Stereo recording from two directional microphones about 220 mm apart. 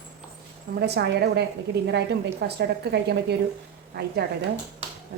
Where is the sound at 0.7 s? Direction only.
50° right (ahead or behind).